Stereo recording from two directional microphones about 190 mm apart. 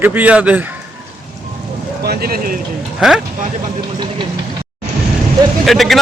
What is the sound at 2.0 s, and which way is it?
Speech, 55° right (ahead or behind).